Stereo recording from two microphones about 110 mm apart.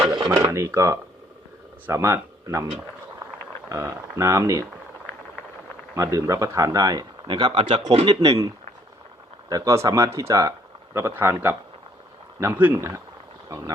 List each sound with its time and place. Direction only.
0.0 s dishes: 45° right (ahead or behind)
0.3 s speech: 25° right (ahead or behind)
3.7 s speech: 25° right (ahead or behind)
5.9 s speech: 30° right (ahead or behind)
7.3 s speech: 45° right (ahead or behind); by 13.7 s 30° right (ahead or behind)